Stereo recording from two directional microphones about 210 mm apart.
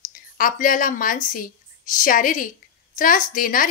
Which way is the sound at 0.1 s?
40° left (ahead or behind).